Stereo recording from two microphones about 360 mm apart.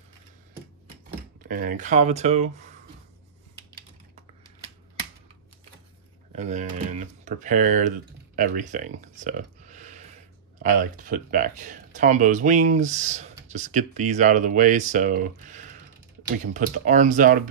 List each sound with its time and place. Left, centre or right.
1.4 s speech: right
6.3 s speech: centre